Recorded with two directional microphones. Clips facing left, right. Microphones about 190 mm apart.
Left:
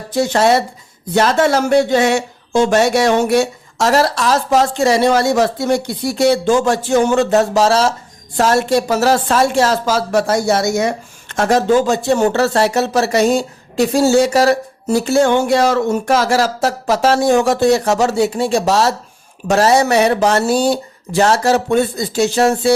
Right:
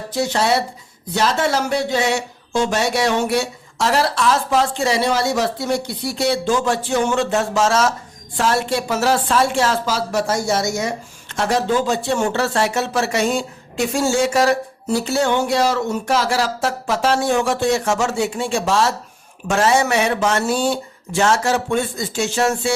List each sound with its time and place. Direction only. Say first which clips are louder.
0.1 s speech: left 5 dB; 50° left (ahead or behind)